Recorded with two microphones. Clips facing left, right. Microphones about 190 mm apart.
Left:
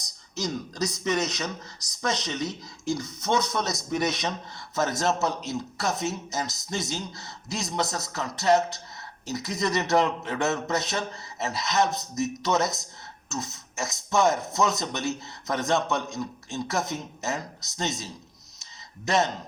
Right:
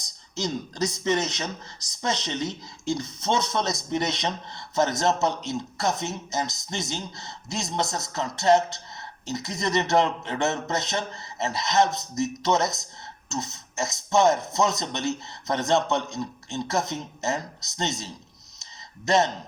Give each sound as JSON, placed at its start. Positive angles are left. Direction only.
{"t": 0.3, "sound": "a man's voice", "side_deg": -25}
{"t": 11.9, "sound": "speech", "side_deg": 0}
{"t": 12.2, "sound": "a man's voice", "side_deg": -20}
{"t": 19.0, "sound": "a man's voice", "side_deg": -20}